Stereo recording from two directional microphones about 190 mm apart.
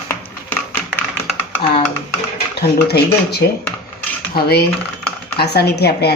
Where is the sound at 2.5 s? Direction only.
60° left (ahead or behind).